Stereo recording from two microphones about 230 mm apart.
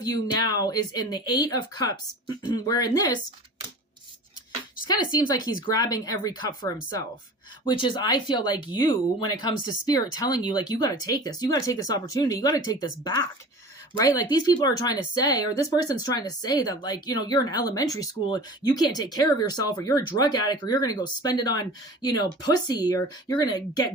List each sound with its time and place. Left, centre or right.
0.0 s speech: centre
4.8 s speech: centre
7.6 s speech: left